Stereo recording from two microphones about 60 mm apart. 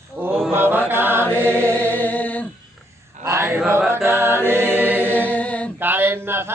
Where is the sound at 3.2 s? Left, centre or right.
Right.